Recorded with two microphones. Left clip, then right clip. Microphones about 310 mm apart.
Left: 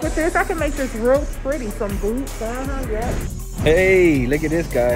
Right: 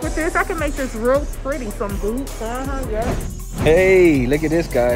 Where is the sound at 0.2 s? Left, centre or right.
Centre.